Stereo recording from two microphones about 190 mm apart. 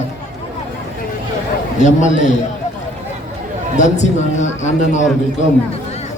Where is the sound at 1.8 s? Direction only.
40° left (ahead or behind).